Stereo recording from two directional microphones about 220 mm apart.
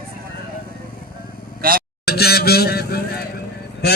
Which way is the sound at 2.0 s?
45° left (ahead or behind).